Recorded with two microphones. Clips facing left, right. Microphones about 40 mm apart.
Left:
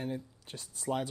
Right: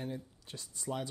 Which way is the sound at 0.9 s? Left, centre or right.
Left.